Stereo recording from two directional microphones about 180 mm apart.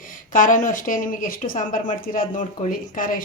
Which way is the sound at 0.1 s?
45° left (ahead or behind).